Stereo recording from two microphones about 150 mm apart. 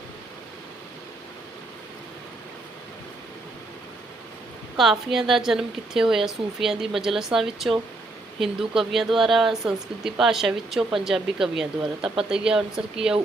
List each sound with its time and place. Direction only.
4.8 s speech: centre (ahead or behind)